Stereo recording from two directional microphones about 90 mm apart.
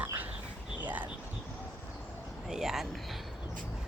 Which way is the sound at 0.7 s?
15° right (ahead or behind).